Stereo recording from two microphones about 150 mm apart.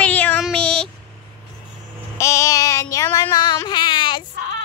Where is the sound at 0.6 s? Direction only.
5° left (ahead or behind).